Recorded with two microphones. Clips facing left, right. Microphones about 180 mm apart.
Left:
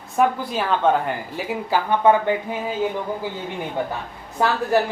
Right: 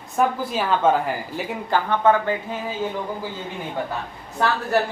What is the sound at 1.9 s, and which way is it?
Speech, 15° left (ahead or behind).